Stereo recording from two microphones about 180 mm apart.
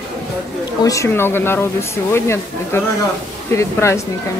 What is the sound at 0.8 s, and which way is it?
Speech, 15° left (ahead or behind).